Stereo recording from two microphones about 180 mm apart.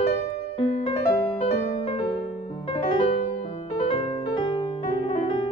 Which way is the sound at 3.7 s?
30° left (ahead or behind).